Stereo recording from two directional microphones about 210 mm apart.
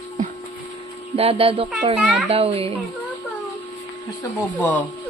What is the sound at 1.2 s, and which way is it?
Speech, 25° right (ahead or behind).